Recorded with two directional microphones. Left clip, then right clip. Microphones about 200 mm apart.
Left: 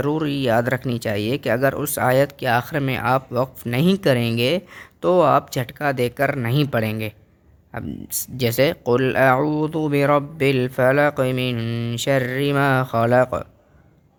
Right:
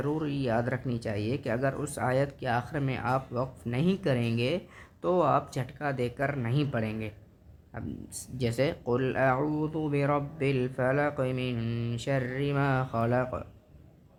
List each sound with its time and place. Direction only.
0.0 s speech: 40° left (ahead or behind)